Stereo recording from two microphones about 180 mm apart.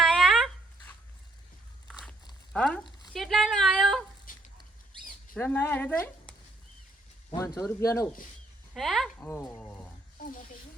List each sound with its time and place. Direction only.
0.0 s a sound: centre (ahead or behind)
1.9 s walk: 5° left (ahead or behind)
2.5 s a sound: 5° left (ahead or behind)
4.3 s dog: 50° left (ahead or behind)
5.3 s speech: 10° left (ahead or behind)
7.3 s speech: 20° left (ahead or behind)
8.7 s speech: centre (ahead or behind)
9.3 s speech: 15° left (ahead or behind)